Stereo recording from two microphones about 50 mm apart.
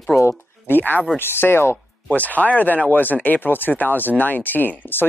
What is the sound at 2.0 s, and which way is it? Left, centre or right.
Speech, left.